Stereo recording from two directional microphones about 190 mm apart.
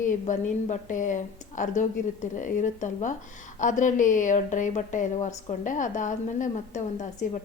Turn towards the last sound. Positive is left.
turn(degrees=40)  # may be behind; listen again after turning